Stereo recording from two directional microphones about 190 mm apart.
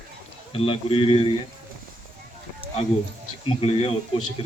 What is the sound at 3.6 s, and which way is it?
Speech, 30° left (ahead or behind).